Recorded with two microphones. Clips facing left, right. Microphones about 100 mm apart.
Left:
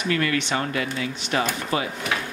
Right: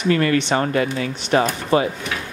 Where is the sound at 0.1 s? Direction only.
35° right (ahead or behind).